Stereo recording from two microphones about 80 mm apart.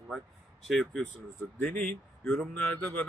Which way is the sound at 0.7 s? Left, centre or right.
Centre.